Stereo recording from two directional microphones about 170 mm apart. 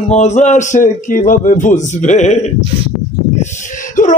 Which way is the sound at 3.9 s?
50° left (ahead or behind).